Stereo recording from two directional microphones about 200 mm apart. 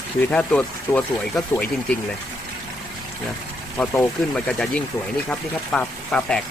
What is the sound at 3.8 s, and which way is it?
Speech, 10° left (ahead or behind).